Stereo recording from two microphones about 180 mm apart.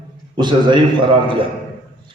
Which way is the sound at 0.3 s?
25° right (ahead or behind).